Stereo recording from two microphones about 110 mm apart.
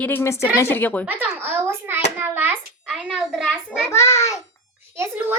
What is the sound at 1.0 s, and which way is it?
A child's voice, 15° right (ahead or behind).